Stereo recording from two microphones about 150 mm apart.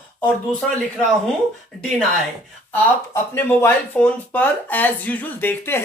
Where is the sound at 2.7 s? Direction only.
15° left (ahead or behind).